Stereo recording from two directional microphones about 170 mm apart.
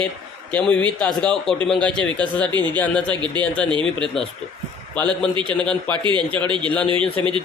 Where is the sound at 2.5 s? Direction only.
25° right (ahead or behind).